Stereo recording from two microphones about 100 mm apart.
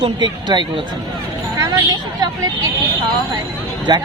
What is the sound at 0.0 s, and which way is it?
Speech, 50° right (ahead or behind).